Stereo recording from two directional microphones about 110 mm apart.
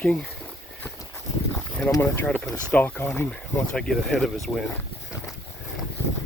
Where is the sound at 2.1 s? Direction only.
20° left (ahead or behind).